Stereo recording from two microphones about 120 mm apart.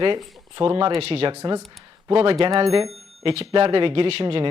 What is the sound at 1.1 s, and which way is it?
Speech, 60° right (ahead or behind).